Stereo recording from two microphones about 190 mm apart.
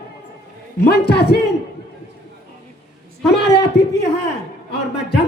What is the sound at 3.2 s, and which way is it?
Speech, 60° left (ahead or behind).